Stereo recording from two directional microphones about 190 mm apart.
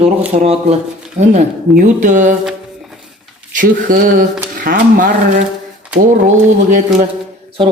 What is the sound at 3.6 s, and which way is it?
A man's voice, 45° right (ahead or behind).